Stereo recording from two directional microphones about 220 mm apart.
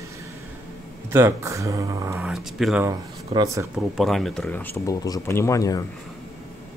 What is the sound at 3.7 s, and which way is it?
Speech, centre (ahead or behind).